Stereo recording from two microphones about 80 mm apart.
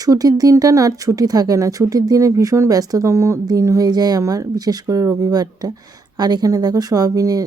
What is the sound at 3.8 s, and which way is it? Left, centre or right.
Speech, right.